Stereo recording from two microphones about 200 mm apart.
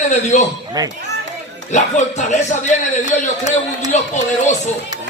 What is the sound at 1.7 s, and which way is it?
A man's voice, 35° left (ahead or behind).